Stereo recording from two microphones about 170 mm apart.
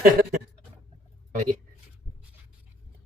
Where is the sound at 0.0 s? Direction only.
60° right (ahead or behind).